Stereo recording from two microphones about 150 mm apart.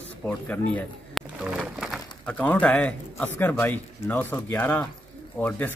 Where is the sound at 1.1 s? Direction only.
5° right (ahead or behind).